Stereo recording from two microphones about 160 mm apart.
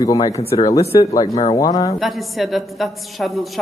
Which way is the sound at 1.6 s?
20° left (ahead or behind).